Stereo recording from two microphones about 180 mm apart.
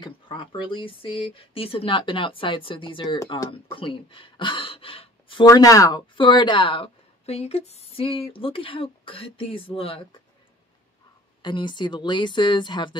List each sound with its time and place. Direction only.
0.0 s speech: 25° left (ahead or behind)
11.4 s speech: 25° left (ahead or behind)